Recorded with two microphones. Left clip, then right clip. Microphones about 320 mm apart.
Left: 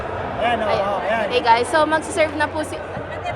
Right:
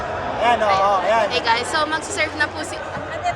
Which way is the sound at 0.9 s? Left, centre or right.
Centre.